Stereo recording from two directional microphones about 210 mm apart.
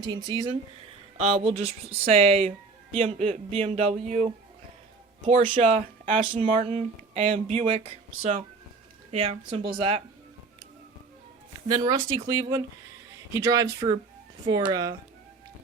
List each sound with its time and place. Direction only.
0.3 s speech: 20° right (ahead or behind)
5.5 s speech: 35° right (ahead or behind)
6.3 s speech: 25° right (ahead or behind)
11.7 s speech: 20° right (ahead or behind)